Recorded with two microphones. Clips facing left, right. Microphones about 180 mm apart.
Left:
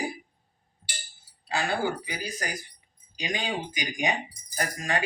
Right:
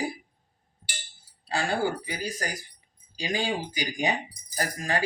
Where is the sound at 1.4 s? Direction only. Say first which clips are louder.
Right 1 dB; 35° right (ahead or behind).